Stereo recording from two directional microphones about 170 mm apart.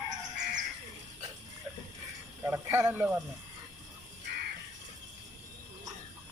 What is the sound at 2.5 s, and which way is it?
Speech, 10° right (ahead or behind).